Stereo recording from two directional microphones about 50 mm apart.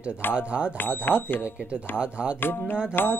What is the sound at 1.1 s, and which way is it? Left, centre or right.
Music, left.